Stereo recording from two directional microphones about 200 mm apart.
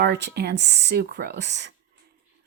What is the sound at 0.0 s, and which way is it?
A woman's voice, 55° right (ahead or behind).